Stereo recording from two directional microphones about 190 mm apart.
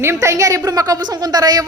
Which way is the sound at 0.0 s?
15° right (ahead or behind).